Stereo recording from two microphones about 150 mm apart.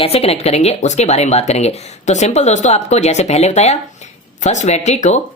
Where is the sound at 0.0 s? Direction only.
40° left (ahead or behind).